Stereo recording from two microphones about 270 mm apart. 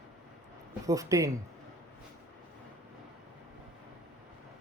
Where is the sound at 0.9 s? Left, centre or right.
Centre.